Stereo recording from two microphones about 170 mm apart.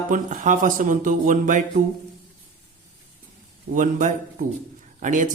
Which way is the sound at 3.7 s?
50° right (ahead or behind).